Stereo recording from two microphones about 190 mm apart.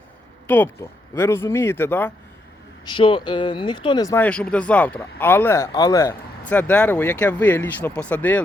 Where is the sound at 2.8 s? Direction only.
25° left (ahead or behind).